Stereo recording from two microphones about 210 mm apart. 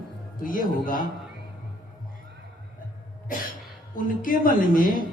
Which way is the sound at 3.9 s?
40° left (ahead or behind).